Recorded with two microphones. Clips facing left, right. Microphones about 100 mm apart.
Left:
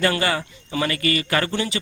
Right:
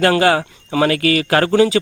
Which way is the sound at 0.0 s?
85° right.